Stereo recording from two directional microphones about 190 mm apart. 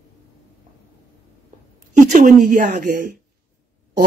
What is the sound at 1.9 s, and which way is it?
A woman's voice, 40° right (ahead or behind).